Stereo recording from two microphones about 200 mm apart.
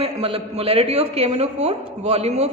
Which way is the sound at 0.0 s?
30° right (ahead or behind).